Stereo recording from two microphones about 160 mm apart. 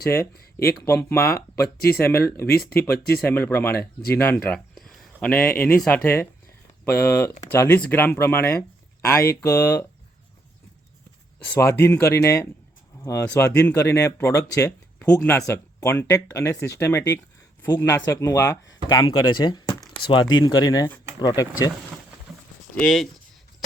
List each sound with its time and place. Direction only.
0.6 s speech: 15° left (ahead or behind)
4.7 s speech: centre (ahead or behind)
11.5 s speech: 15° left (ahead or behind)
22.7 s speech: 5° left (ahead or behind)